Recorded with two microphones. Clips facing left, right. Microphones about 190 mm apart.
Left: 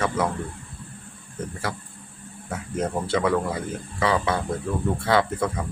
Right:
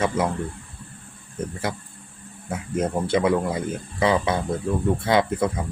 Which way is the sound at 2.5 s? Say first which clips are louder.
Right 2 dB; 15° right (ahead or behind).